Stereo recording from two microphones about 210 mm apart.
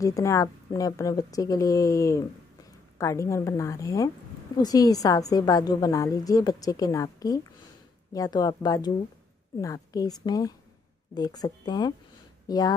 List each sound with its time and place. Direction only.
0.0 s a woman's voice: 15° left (ahead or behind)